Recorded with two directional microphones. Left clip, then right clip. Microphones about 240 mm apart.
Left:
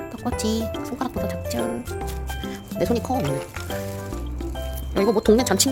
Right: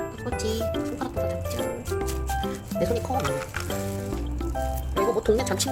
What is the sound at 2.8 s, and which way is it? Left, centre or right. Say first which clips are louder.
Speech: left 3 dB; left.